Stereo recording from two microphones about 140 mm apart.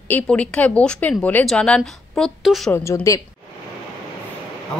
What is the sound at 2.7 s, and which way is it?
Speech, 20° left (ahead or behind).